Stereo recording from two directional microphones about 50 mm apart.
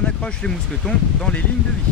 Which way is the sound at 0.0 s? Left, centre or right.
Centre.